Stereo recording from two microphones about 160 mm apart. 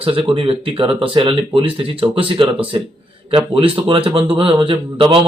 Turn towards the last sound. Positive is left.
turn(degrees=-35)  # may be behind; listen again after turning